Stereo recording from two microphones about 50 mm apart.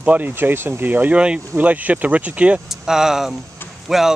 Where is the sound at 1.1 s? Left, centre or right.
Right.